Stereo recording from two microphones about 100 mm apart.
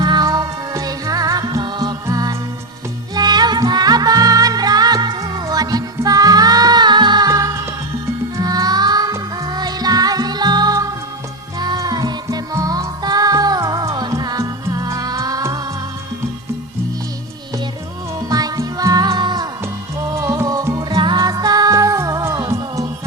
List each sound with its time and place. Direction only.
0.0 s music: 45° right (ahead or behind)
18.2 s music: 40° right (ahead or behind)
20.1 s music: 35° right (ahead or behind)